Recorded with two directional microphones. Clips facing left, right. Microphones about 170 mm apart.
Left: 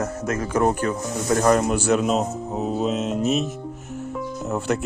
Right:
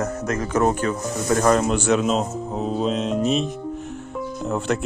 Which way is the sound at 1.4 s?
15° left (ahead or behind).